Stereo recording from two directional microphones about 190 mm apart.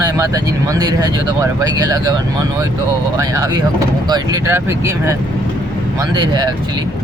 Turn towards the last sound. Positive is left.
turn(degrees=-20)  # may be behind; listen again after turning